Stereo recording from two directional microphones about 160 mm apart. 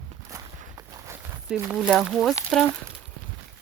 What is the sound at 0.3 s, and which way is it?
Walk, 20° right (ahead or behind).